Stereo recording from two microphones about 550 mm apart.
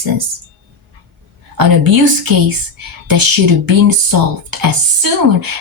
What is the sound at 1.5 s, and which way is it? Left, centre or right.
Speech, right.